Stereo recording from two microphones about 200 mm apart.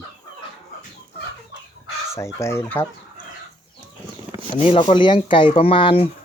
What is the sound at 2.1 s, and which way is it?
Speech, 15° left (ahead or behind).